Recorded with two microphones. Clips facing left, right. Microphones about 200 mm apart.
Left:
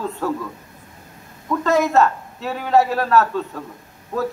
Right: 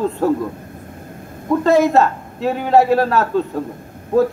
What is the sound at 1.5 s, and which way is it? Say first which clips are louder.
A man's voice: right 4 dB; 30° right (ahead or behind).